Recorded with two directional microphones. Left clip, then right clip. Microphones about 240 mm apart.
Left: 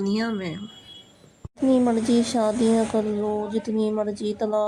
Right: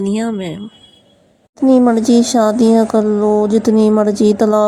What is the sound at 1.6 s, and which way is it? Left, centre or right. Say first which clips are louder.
Speech: right 10 dB; right.